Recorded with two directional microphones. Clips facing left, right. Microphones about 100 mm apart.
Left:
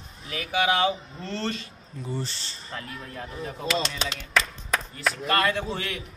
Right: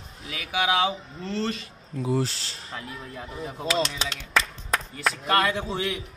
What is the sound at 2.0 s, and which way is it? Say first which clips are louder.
Speech: right 7 dB; 90° right.